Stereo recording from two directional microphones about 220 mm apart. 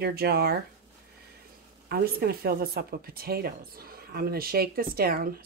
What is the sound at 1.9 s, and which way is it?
Speech, 45° right (ahead or behind).